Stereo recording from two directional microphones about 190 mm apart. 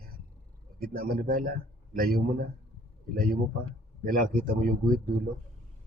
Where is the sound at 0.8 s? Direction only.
50° right (ahead or behind).